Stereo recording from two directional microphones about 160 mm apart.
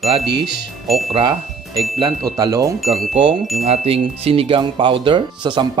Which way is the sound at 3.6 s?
40° right (ahead or behind).